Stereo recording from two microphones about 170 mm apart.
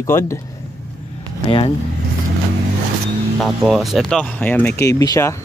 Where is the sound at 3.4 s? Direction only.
Centre (ahead or behind); by 5.3 s 20° left (ahead or behind).